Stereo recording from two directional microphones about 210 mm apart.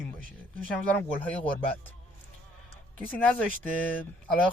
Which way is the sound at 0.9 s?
5° left (ahead or behind).